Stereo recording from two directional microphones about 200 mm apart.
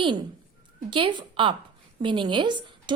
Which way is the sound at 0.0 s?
25° right (ahead or behind).